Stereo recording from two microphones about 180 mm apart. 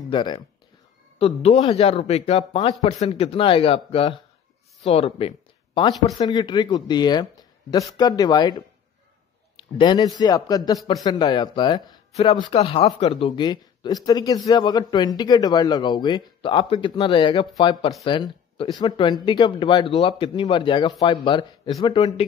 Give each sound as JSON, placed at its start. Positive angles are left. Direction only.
{"t": 0.1, "sound": "speech", "side_deg": 25}